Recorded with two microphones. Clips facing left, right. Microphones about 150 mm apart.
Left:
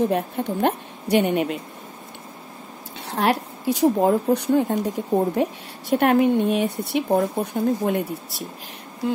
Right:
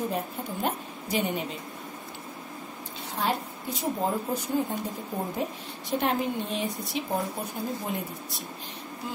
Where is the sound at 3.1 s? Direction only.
85° left.